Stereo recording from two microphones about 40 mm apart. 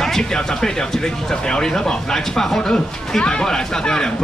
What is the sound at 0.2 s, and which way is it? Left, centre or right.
A man's voice, centre.